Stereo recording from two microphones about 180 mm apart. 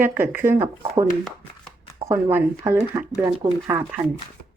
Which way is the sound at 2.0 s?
15° right (ahead or behind).